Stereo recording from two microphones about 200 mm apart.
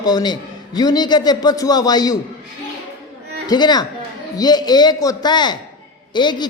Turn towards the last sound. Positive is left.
turn(degrees=20)  # may be behind; listen again after turning